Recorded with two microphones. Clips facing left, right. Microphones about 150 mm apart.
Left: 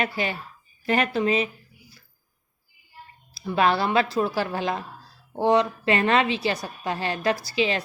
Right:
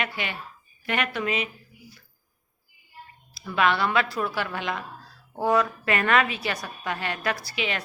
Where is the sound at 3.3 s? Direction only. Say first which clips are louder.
Left 2 dB; 30° left (ahead or behind).